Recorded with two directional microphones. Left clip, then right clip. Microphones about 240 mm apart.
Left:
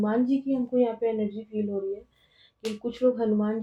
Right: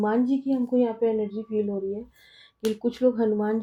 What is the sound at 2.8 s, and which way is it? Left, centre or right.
Speech, right.